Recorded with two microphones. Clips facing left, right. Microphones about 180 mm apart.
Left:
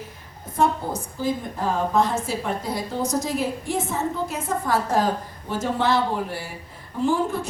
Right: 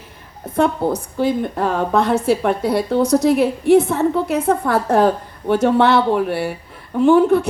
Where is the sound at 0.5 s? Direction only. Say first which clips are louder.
Right 6 dB; 65° right (ahead or behind).